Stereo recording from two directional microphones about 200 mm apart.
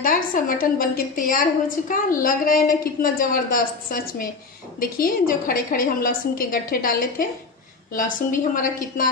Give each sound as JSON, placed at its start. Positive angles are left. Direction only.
{"t": 0.0, "sound": "a woman's voice", "side_deg": 45}